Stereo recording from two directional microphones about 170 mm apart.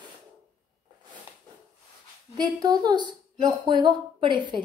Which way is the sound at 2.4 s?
25° right (ahead or behind).